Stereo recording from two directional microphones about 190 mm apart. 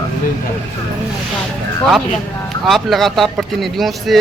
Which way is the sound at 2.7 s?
Centre (ahead or behind).